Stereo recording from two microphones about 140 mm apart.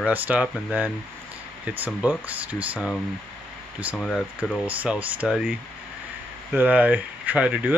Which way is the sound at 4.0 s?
5° left (ahead or behind).